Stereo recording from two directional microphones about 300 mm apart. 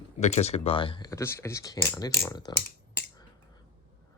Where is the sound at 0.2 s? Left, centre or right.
Left.